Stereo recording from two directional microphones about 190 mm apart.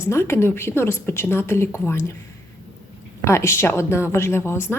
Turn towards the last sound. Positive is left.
turn(degrees=15)  # may be behind; listen again after turning